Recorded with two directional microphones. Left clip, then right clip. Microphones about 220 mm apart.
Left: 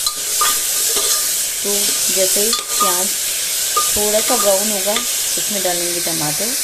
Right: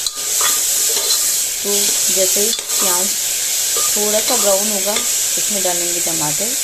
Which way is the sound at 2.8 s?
Centre (ahead or behind).